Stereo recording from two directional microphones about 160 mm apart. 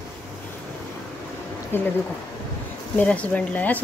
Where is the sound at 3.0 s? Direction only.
10° left (ahead or behind).